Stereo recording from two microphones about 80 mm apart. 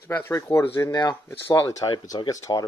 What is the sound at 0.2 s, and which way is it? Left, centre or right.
Speech, left.